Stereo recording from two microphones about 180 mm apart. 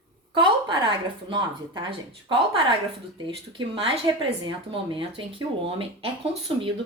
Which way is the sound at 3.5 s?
30° right (ahead or behind).